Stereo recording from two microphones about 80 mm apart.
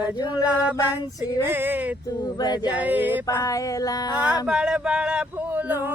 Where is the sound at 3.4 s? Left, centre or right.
Left.